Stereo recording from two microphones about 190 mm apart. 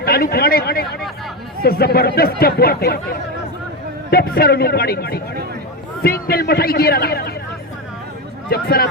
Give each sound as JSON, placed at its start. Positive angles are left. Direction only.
{"t": 0.0, "sound": "a man's voice", "side_deg": 55}
{"t": 8.4, "sound": "speech", "side_deg": 55}